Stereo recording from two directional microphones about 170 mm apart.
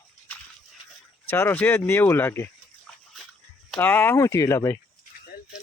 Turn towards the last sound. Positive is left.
turn(degrees=15)  # may be behind; listen again after turning